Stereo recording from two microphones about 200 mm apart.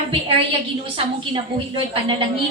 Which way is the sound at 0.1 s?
25° right (ahead or behind).